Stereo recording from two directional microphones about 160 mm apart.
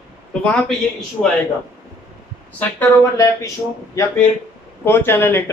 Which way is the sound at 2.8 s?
20° left (ahead or behind).